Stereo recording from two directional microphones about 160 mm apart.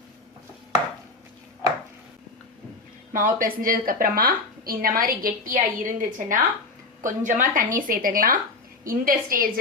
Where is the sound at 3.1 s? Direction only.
60° right (ahead or behind).